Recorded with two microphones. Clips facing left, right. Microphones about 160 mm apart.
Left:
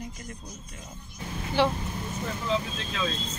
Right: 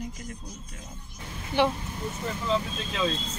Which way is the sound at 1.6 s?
20° right (ahead or behind).